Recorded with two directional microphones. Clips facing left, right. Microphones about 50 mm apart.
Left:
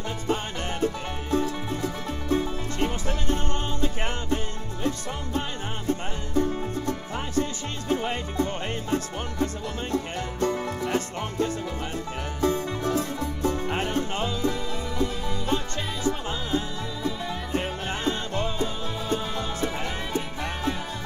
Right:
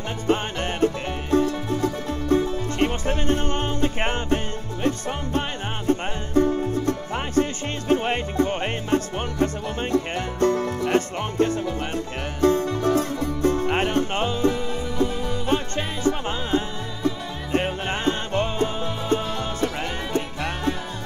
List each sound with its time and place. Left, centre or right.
0.3 s music: right
5.9 s music: right